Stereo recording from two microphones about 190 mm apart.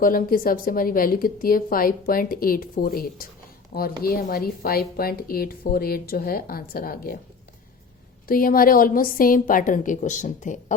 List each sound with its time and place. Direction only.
0.0 s a woman's voice: 45° left (ahead or behind)
8.3 s a woman's voice: 50° left (ahead or behind)